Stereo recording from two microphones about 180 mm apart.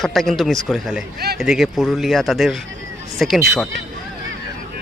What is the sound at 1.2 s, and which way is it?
Speech, 60° right (ahead or behind).